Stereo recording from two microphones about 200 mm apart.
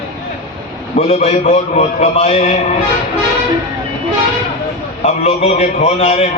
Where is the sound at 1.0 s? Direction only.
30° left (ahead or behind).